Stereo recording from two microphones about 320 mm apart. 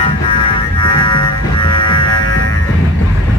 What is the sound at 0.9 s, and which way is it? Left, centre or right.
Music, centre.